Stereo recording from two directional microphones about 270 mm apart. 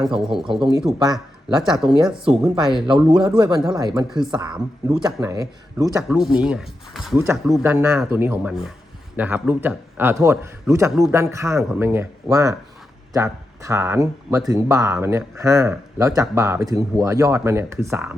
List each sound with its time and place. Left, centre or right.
0.1 s speech: centre
0.9 s speech: centre
1.7 s speech: centre
2.8 s speech: centre
6.0 s speech: centre
11.2 s speech: centre